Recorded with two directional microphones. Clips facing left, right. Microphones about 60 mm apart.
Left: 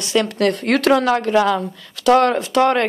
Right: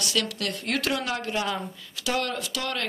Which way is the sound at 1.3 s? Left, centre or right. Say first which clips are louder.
Left 12 dB; left.